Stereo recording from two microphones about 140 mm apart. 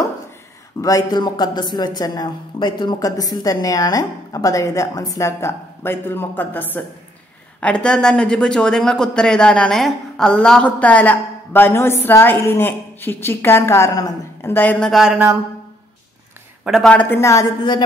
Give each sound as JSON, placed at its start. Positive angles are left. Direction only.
{"t": 0.7, "sound": "speech", "side_deg": 25}
{"t": 14.5, "sound": "speech", "side_deg": 15}
{"t": 14.9, "sound": "speech", "side_deg": -5}
{"t": 16.6, "sound": "speech", "side_deg": -5}
{"t": 16.9, "sound": "speech", "side_deg": 10}
{"t": 17.2, "sound": "speech", "side_deg": 20}
{"t": 17.6, "sound": "a woman's voice", "side_deg": 35}